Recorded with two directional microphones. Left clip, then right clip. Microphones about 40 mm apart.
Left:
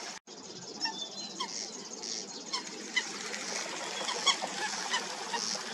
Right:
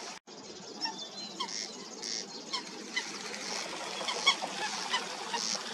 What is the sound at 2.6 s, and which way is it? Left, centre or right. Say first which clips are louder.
Bird flight: left 5 dB; centre.